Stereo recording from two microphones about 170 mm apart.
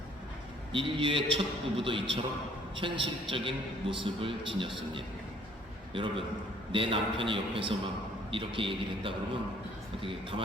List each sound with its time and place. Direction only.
0.7 s a man's voice: 30° right (ahead or behind)
5.9 s a man's voice: 30° right (ahead or behind)